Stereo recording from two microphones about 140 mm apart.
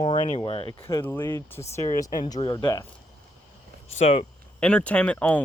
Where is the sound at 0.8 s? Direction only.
25° left (ahead or behind).